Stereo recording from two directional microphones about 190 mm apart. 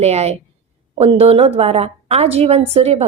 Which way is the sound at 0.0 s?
35° right (ahead or behind).